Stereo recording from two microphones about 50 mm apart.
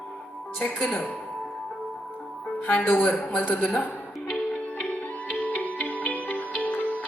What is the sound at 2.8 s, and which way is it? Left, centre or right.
Speech, left.